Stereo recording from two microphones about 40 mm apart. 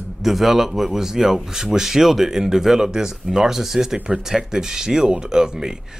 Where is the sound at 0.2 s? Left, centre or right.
Centre.